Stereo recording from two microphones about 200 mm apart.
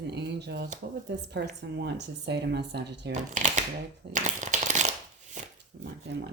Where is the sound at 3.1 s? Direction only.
35° right (ahead or behind).